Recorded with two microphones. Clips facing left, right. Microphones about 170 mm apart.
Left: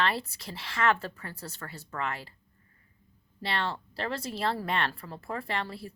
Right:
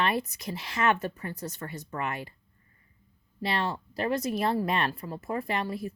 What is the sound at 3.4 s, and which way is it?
Speech, 20° right (ahead or behind).